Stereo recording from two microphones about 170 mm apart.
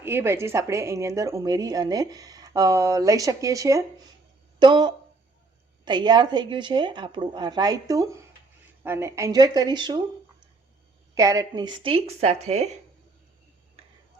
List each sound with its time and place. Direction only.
0.0 s a woman's voice: 15° right (ahead or behind)
11.1 s speech: 20° right (ahead or behind); by 12.6 s 40° right (ahead or behind)